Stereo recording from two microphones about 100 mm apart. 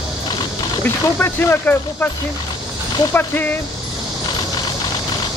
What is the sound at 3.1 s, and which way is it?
Speech, 20° left (ahead or behind).